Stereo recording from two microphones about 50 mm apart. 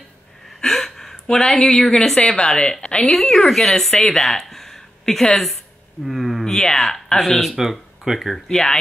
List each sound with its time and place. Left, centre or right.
0.6 s gasp: centre
1.8 s speech: centre
3.1 s speech: centre
6.4 s speech: centre
8.5 s speech: centre